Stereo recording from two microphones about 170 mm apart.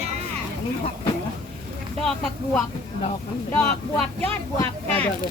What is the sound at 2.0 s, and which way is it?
Speech, centre (ahead or behind).